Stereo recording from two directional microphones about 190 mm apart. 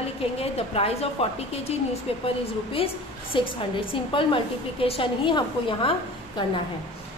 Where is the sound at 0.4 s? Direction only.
30° left (ahead or behind).